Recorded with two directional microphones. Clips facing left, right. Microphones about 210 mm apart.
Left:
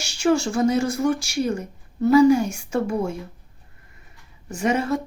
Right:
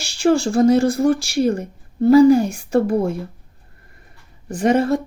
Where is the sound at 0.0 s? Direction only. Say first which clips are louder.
Right 3 dB; 35° right (ahead or behind).